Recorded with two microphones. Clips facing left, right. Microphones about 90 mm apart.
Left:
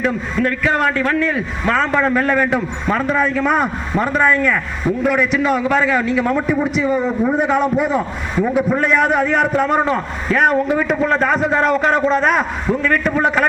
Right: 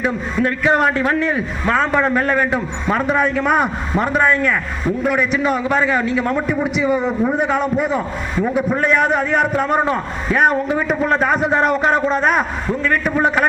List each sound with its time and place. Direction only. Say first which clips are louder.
0.0 s a man's voice: left 1 dB; 10° right (ahead or behind)